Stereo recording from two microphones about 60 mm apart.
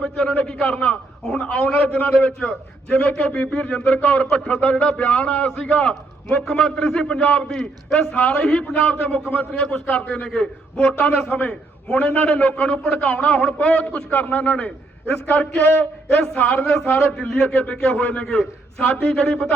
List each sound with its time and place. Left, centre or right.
0.0 s a man's voice: centre
10.2 s a man's voice: centre
11.3 s a man's voice: left